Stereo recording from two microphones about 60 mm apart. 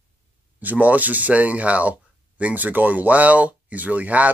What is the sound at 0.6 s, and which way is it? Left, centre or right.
Speech, right.